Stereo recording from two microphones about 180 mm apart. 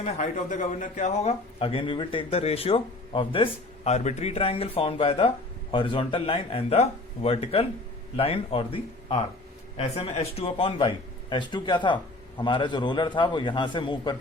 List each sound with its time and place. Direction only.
0.0 s a man's voice: 45° left (ahead or behind); by 14.2 s 25° left (ahead or behind)